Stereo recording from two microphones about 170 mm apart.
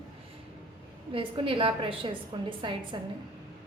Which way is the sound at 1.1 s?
30° right (ahead or behind).